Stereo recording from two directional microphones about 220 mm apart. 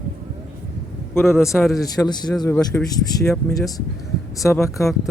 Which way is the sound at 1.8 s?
15° left (ahead or behind).